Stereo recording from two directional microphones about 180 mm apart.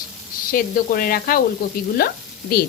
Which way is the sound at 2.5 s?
55° left (ahead or behind).